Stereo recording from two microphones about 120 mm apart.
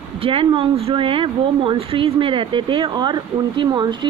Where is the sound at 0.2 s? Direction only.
45° right (ahead or behind).